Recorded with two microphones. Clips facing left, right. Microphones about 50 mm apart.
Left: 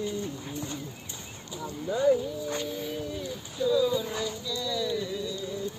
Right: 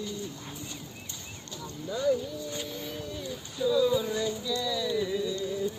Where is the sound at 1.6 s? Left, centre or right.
Centre.